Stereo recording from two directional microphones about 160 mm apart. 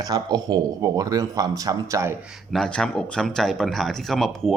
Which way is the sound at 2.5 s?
5° left (ahead or behind).